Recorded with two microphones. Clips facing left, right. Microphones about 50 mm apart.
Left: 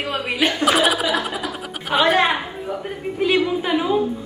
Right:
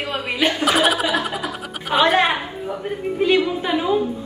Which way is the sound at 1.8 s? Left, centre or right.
Centre.